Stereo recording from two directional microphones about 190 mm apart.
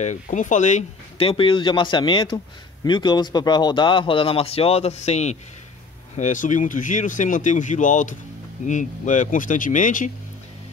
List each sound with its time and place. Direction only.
0.0 s speech: 40° left (ahead or behind)